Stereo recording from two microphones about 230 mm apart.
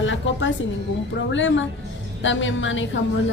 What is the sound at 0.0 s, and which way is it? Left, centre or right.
Speech, left.